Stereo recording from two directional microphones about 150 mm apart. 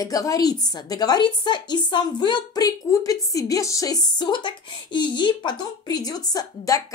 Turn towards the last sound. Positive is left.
turn(degrees=25)  # may be behind; listen again after turning